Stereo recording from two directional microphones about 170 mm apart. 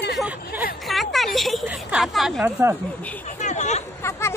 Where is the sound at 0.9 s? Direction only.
Centre (ahead or behind).